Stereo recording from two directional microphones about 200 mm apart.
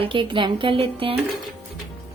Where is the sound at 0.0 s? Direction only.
25° right (ahead or behind).